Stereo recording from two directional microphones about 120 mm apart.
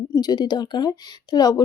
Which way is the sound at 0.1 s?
35° left (ahead or behind).